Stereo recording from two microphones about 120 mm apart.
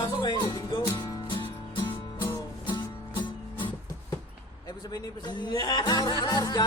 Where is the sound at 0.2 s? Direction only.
40° left (ahead or behind).